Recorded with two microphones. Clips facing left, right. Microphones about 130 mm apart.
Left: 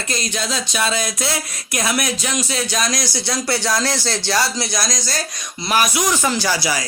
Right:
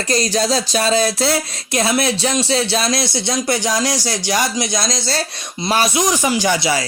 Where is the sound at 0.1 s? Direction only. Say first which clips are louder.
Right 8 dB; 35° right (ahead or behind).